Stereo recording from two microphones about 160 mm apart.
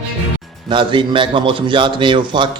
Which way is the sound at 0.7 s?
30° right (ahead or behind).